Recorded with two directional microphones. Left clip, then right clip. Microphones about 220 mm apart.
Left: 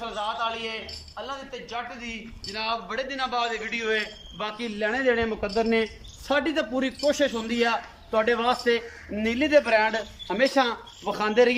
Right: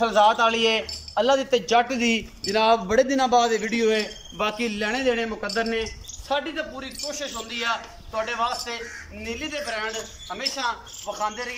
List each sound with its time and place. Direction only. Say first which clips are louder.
0.0 s a man's voice: right 11 dB; 45° right (ahead or behind); by 5.3 s 5° right (ahead or behind)
5.4 s a man's voice: left 1 dB; 20° left (ahead or behind); by 11.5 s 45° left (ahead or behind)